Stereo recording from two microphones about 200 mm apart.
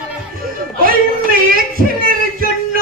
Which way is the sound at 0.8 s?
45° right (ahead or behind).